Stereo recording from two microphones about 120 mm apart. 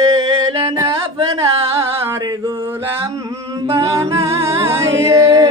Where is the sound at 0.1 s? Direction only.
45° right (ahead or behind).